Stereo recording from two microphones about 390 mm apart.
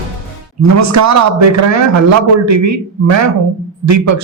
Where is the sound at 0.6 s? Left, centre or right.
Right.